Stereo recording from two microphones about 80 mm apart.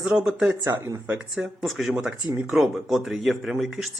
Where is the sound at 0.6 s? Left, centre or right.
Right.